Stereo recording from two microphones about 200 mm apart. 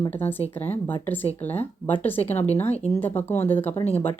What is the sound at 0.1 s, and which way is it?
Speech, 10° left (ahead or behind).